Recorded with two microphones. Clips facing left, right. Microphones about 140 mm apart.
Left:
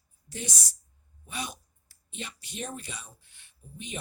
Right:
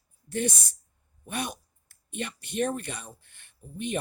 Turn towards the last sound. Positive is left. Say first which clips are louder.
# right 9 dB
turn(degrees=-55)  # may be behind; listen again after turning